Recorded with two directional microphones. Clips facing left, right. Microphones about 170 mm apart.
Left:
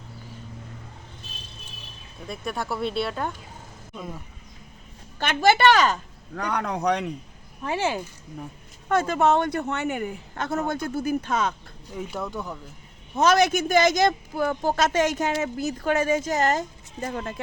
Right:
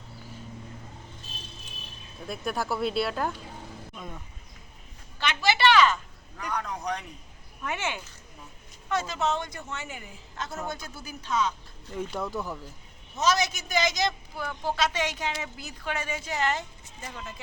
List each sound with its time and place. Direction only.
2.2 s speech: centre (ahead or behind)
5.2 s speech: 50° left (ahead or behind)
6.3 s speech: 75° left (ahead or behind)
7.6 s speech: 30° left (ahead or behind)
8.9 s a woman's voice: 55° left (ahead or behind)
11.9 s speech: centre (ahead or behind)
13.1 s speech: 55° left (ahead or behind)